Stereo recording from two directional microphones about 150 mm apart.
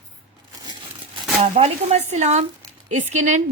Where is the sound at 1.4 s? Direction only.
45° right (ahead or behind).